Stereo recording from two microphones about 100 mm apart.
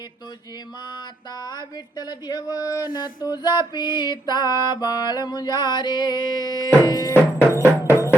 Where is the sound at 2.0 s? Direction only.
45° left (ahead or behind).